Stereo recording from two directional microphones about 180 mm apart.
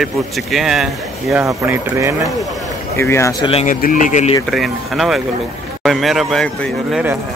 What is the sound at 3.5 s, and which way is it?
Speech, 45° left (ahead or behind).